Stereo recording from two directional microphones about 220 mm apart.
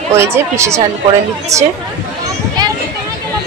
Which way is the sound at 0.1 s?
10° right (ahead or behind).